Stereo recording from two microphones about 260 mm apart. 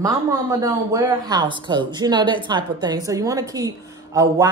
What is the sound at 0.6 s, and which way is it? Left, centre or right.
Speech, centre.